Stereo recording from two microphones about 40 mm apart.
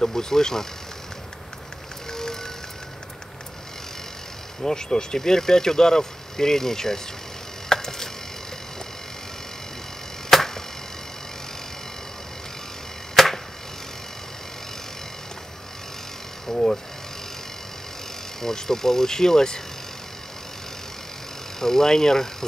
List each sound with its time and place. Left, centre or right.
0.0 s speech: centre
2.1 s vehicle: centre
4.6 s speech: centre
7.7 s a sound: centre
10.3 s arrow: centre
13.1 s arrow: centre
16.4 s a sound: centre
18.4 s speech: centre
21.5 s speech: centre